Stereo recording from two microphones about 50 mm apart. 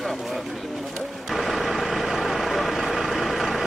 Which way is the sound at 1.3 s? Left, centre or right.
Centre.